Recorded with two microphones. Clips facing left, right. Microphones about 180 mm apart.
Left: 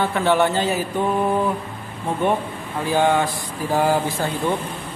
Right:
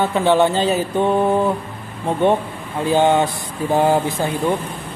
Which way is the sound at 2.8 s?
25° right (ahead or behind).